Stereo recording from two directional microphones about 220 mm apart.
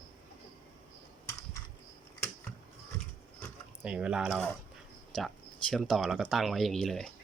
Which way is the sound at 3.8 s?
5° right (ahead or behind).